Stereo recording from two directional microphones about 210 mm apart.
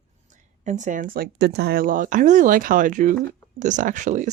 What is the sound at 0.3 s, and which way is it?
Speech, 35° right (ahead or behind).